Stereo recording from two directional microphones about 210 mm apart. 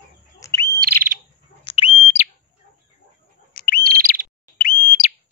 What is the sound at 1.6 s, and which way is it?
Bird, 25° left (ahead or behind).